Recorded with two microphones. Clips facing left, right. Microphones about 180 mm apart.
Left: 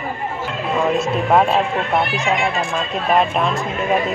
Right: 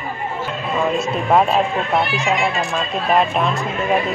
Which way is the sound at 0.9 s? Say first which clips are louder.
Even; centre (ahead or behind).